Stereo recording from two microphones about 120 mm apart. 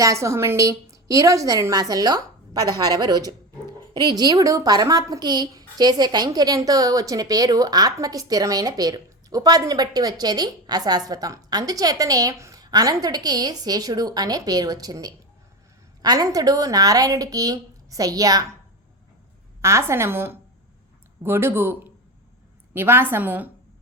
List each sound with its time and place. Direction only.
0.0 s speech: 25° right (ahead or behind)
19.6 s a woman's voice: 25° right (ahead or behind)